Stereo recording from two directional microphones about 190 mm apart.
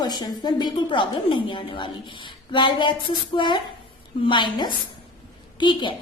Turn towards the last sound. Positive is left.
turn(degrees=25)  # may be behind; listen again after turning